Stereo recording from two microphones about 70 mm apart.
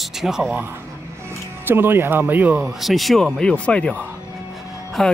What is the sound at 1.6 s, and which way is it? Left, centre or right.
Speech, right.